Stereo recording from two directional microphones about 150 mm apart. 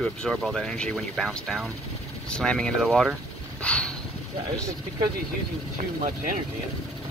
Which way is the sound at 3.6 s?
5° left (ahead or behind).